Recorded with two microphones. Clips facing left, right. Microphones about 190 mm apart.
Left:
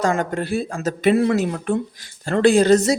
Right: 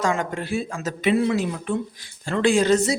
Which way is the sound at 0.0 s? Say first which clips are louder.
Left 3 dB; 40° left (ahead or behind).